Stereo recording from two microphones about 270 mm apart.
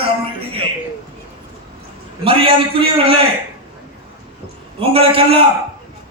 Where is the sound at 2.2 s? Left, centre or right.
Centre.